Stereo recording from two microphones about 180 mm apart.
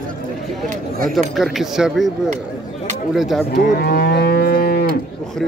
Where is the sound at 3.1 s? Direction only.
Centre (ahead or behind).